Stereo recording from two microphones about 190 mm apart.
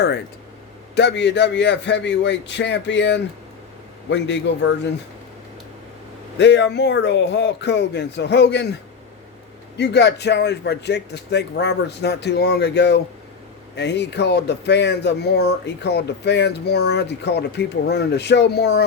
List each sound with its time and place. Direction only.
0.9 s a man's voice: 65° left (ahead or behind)
6.3 s speech: 70° left (ahead or behind)
9.7 s speech: 65° left (ahead or behind)